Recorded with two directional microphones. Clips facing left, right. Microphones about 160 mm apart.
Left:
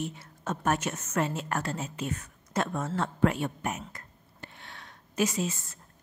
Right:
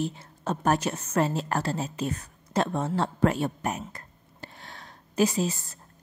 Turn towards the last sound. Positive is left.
turn(degrees=-35)  # may be behind; listen again after turning